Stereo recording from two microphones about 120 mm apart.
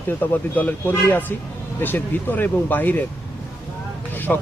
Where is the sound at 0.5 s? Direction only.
15° left (ahead or behind).